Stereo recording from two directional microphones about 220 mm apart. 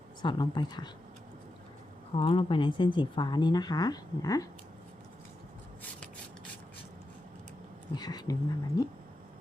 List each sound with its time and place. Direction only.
0.2 s speech: 20° left (ahead or behind)
2.1 s speech: 25° left (ahead or behind)
7.9 s speech: 20° left (ahead or behind)